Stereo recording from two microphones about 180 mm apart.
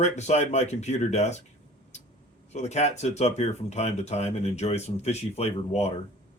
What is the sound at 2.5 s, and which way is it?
Speech, 40° left (ahead or behind).